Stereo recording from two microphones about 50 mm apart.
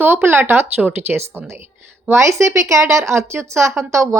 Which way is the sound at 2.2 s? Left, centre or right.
Right.